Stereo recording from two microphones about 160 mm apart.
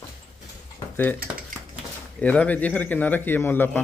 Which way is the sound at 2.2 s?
10° left (ahead or behind).